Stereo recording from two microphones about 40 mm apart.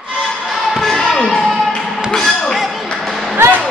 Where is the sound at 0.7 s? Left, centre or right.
Centre.